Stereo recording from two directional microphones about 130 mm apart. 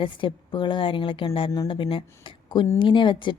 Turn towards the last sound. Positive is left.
turn(degrees=40)  # may be behind; listen again after turning